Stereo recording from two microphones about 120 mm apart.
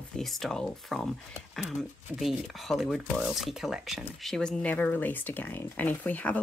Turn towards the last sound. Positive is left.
turn(degrees=15)  # may be behind; listen again after turning